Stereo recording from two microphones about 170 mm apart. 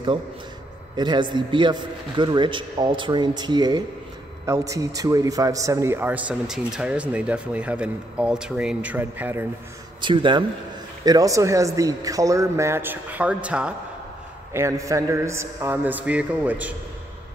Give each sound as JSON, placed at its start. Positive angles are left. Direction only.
{"t": 0.9, "sound": "a man's voice", "side_deg": -25}
{"t": 10.0, "sound": "a man's voice", "side_deg": -30}
{"t": 14.5, "sound": "a man's voice", "side_deg": -15}